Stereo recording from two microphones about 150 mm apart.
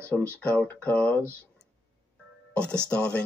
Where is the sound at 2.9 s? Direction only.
5° left (ahead or behind).